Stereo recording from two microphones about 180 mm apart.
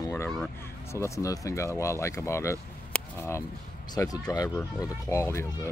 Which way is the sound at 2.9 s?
15° left (ahead or behind).